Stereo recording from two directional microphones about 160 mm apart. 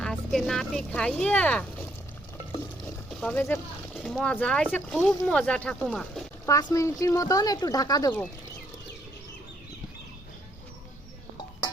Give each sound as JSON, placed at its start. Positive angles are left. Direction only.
{"t": 0.0, "sound": "speech", "side_deg": 0}
{"t": 3.1, "sound": "speech", "side_deg": 5}
{"t": 3.9, "sound": "speech", "side_deg": 0}
{"t": 6.4, "sound": "speech", "side_deg": 20}